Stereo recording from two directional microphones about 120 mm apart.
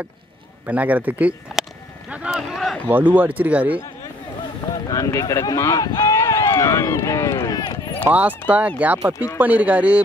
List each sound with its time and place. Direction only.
0.7 s speech: 15° right (ahead or behind)
2.9 s speech: 15° right (ahead or behind)
4.8 s speech: 30° left (ahead or behind)
8.1 s speech: 10° right (ahead or behind)